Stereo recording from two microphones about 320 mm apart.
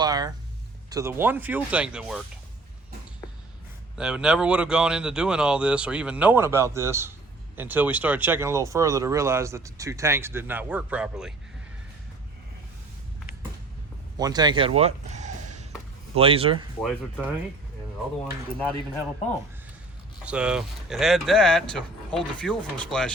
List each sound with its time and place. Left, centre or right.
0.0 s a sound: centre
0.9 s speech: centre
3.9 s speech: centre
14.2 s speech: centre
16.8 s speech: centre
20.2 s speech: centre